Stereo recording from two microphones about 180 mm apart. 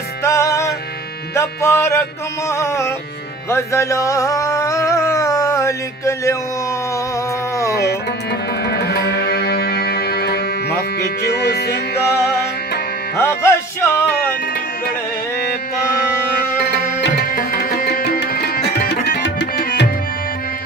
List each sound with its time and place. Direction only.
0.2 s music: 15° left (ahead or behind)
7.7 s music: 65° left (ahead or behind)
13.2 s music: 15° left (ahead or behind)
16.3 s tabla: 65° left (ahead or behind)